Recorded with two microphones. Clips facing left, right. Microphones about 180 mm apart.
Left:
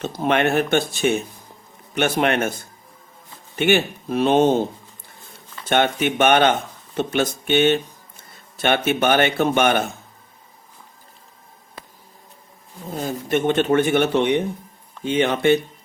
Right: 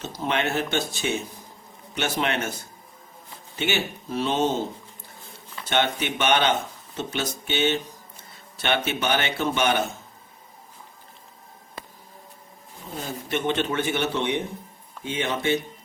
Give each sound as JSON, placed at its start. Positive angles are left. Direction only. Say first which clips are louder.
{"t": 0.0, "sound": "speech", "louder": "left 7 dB", "side_deg": 55}
{"t": 3.5, "sound": "speech", "louder": "left 8 dB", "side_deg": 55}
{"t": 5.6, "sound": "speech", "louder": "left 5 dB", "side_deg": 50}
{"t": 13.0, "sound": "speech", "louder": "left 7 dB", "side_deg": 45}